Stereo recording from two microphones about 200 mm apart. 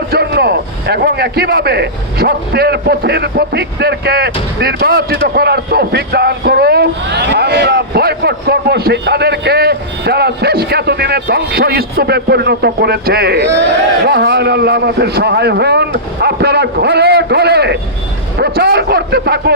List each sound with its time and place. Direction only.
0.1 s a man's voice: 55° right (ahead or behind)